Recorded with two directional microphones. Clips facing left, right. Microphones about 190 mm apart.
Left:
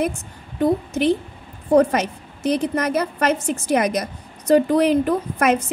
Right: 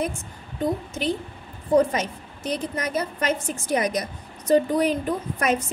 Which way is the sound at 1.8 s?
70° left (ahead or behind).